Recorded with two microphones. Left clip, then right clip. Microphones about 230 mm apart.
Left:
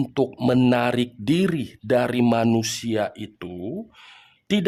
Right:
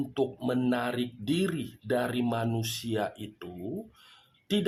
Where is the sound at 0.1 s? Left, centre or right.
Left.